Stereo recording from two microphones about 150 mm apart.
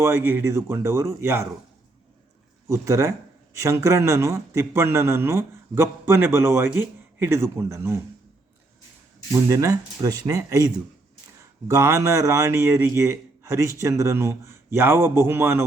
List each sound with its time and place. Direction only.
0.0 s a man's voice: 15° right (ahead or behind)
2.6 s a man's voice: 20° right (ahead or behind)
9.3 s speech: 20° right (ahead or behind)
11.7 s a man's voice: 20° right (ahead or behind)